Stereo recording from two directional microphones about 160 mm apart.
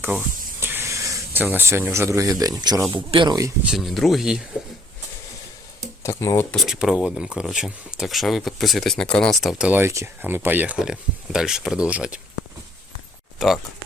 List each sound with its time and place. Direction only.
0.0 s speech: 15° right (ahead or behind)
3.6 s speech: centre (ahead or behind)
6.0 s speech: 20° left (ahead or behind)
6.5 s speech: centre (ahead or behind)
13.4 s speech: centre (ahead or behind)